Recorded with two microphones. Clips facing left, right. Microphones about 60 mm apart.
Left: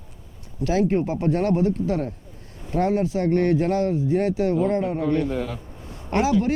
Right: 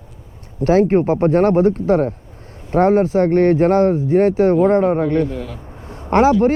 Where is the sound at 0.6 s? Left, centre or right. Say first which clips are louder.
Right 8 dB; right.